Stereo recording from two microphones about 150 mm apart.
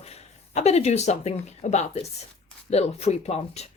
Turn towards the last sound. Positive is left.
turn(degrees=45)  # may be behind; listen again after turning